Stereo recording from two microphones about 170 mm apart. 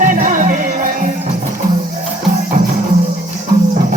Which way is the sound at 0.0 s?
50° right (ahead or behind).